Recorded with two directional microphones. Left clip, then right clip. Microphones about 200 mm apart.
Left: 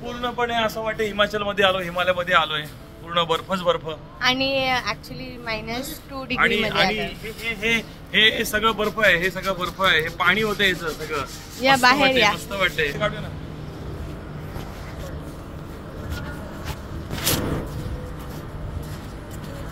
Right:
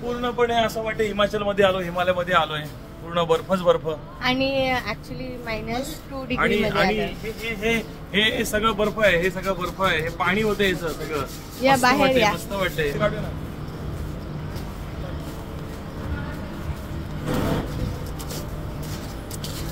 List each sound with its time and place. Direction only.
0.2 s a man's voice: 5° left (ahead or behind); by 4.0 s 35° right (ahead or behind)
4.2 s a woman's voice: 10° left (ahead or behind)
7.4 s a man's voice: 20° right (ahead or behind)
8.1 s a man's voice: 5° right (ahead or behind)
11.6 s speech: 10° left (ahead or behind)
12.4 s a man's voice: 20° right (ahead or behind)